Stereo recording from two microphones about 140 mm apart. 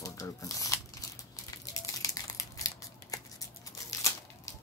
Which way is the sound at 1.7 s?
25° left (ahead or behind).